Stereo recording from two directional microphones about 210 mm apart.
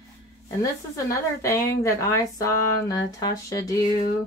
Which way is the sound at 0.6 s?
15° left (ahead or behind).